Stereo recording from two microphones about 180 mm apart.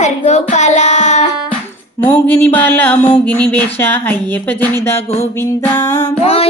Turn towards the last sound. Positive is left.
turn(degrees=35)  # may be behind; listen again after turning